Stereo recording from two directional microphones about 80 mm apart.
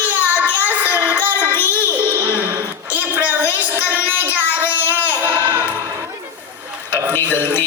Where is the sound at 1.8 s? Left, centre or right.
Right.